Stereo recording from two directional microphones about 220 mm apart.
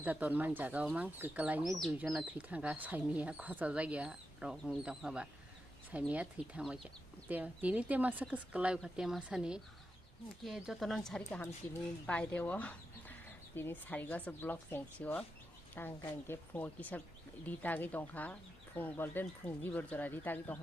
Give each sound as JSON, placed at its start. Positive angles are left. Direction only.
{"t": 0.0, "sound": "speech", "side_deg": -5}